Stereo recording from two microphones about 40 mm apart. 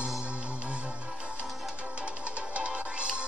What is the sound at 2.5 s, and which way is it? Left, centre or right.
Music, right.